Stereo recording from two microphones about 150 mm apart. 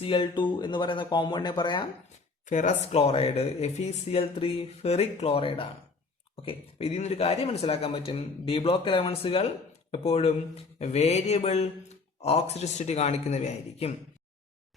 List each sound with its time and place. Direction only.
0.0 s speech: 35° left (ahead or behind)
2.5 s speech: 50° left (ahead or behind)
2.8 s speech: 40° left (ahead or behind)